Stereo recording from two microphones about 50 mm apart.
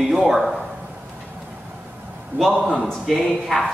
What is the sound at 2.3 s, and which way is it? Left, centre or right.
Speech, right.